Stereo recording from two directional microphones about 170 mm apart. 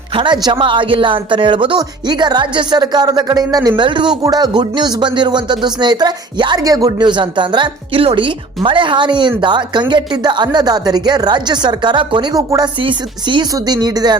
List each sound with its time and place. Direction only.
0.2 s speech: 30° right (ahead or behind)